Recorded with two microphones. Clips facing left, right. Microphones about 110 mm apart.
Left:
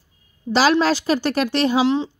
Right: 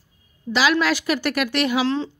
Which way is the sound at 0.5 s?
35° left (ahead or behind).